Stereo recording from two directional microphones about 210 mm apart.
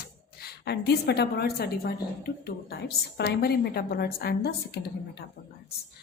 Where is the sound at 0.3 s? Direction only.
50° left (ahead or behind).